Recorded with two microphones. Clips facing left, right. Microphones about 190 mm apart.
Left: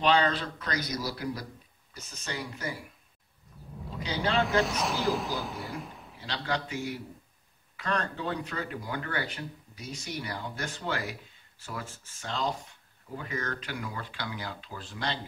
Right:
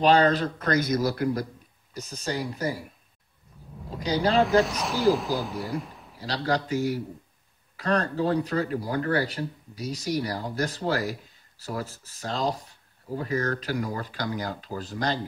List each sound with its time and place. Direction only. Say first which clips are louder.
0.0 s speech: right 6 dB; 40° right (ahead or behind)
2.0 s speech: right 7 dB; 40° right (ahead or behind)
4.0 s speech: right 6 dB; 40° right (ahead or behind)
4.4 s speech: right 4 dB; centre (ahead or behind)
6.1 s speech: right 6 dB; 40° right (ahead or behind)